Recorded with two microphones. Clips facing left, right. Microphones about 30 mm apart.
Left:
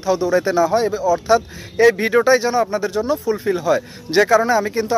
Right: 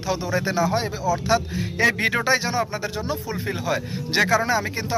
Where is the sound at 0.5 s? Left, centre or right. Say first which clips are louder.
Left 4 dB; right.